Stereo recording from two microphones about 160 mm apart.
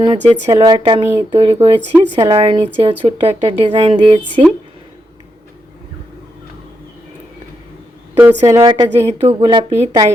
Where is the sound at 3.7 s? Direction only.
35° right (ahead or behind).